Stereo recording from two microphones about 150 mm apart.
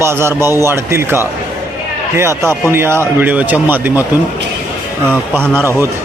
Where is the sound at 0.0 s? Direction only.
15° right (ahead or behind).